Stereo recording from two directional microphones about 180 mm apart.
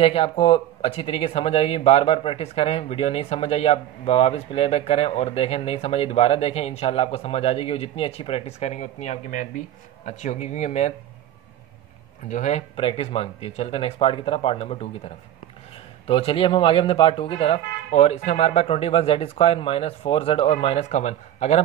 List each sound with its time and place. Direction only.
0.0 s speech: 30° left (ahead or behind)
12.3 s speech: 40° left (ahead or behind)
16.1 s speech: 30° left (ahead or behind)